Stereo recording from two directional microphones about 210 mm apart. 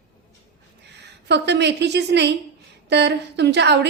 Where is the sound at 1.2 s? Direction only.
55° right (ahead or behind).